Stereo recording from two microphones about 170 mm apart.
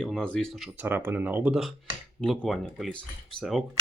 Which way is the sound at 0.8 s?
15° right (ahead or behind).